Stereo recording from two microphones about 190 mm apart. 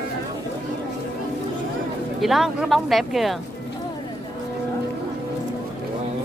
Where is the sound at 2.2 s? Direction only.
Centre (ahead or behind).